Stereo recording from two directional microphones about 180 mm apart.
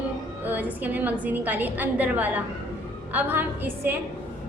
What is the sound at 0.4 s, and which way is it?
A woman's voice, 10° right (ahead or behind).